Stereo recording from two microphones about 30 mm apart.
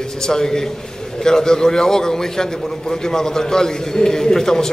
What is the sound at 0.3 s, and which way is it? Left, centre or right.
A man's voice, centre.